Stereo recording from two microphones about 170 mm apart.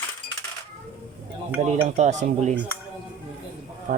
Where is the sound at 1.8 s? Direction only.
45° right (ahead or behind).